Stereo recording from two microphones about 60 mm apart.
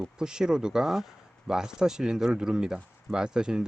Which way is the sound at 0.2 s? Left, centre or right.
Centre.